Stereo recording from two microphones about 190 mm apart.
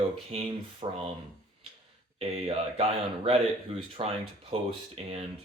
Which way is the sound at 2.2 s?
30° right (ahead or behind).